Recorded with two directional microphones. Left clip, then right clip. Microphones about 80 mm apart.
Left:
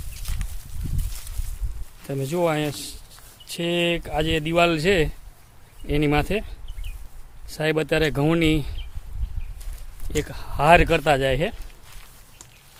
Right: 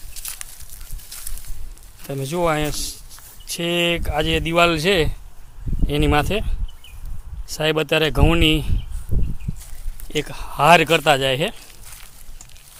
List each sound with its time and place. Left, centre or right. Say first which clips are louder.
2.0 s speech: right 2 dB; left
10.1 s speech: right 3 dB; centre